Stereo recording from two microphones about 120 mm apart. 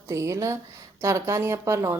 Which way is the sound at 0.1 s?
25° right (ahead or behind).